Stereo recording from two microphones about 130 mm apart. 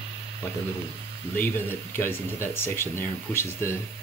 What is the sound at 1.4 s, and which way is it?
Speech, 15° left (ahead or behind).